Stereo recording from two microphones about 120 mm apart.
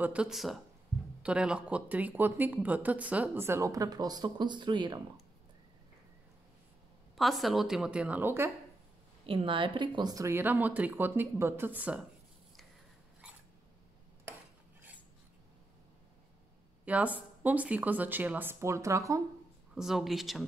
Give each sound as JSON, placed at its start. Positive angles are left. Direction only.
{"t": 0.0, "sound": "a woman's voice", "side_deg": -10}
{"t": 7.2, "sound": "a woman's voice", "side_deg": 0}
{"t": 9.2, "sound": "speech", "side_deg": -50}
{"t": 10.3, "sound": "speech", "side_deg": -15}
{"t": 16.8, "sound": "speech", "side_deg": -10}
{"t": 19.7, "sound": "a woman's voice", "side_deg": -5}